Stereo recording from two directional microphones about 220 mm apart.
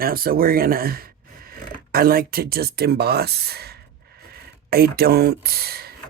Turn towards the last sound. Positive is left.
turn(degrees=-45)  # may be behind; listen again after turning